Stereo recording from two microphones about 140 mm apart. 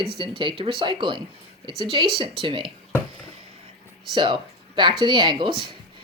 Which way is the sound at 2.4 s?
40° right (ahead or behind).